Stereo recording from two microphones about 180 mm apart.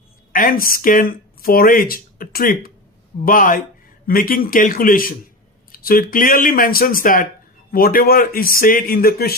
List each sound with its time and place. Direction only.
0.3 s speech: 50° left (ahead or behind)